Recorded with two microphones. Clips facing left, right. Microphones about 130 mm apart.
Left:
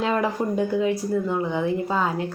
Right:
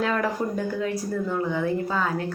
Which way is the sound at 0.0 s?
20° left (ahead or behind).